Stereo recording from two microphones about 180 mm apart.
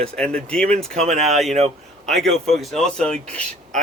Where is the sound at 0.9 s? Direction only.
40° right (ahead or behind).